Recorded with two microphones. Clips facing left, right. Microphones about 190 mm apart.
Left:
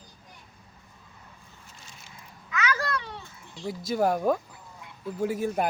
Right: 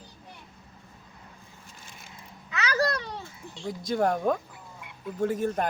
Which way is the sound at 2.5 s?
35° right (ahead or behind).